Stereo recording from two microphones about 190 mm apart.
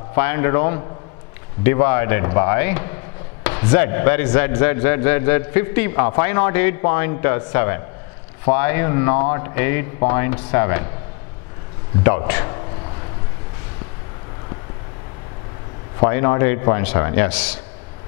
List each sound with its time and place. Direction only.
0.1 s a man's voice: 15° left (ahead or behind)
16.0 s a man's voice: 20° left (ahead or behind)